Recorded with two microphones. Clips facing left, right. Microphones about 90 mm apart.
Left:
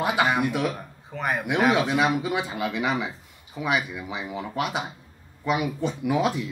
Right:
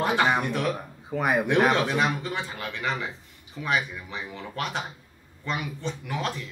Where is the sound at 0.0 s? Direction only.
5° left (ahead or behind).